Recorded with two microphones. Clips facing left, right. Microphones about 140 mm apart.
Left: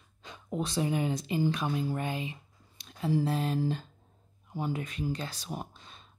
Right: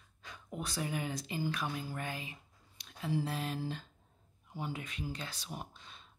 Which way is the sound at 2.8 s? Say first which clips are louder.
Left 7 dB; 35° left (ahead or behind).